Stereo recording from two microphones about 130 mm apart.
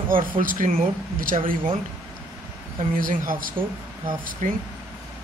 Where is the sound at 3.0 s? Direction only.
90° right.